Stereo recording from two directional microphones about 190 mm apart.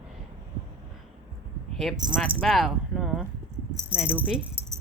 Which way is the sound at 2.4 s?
Centre (ahead or behind).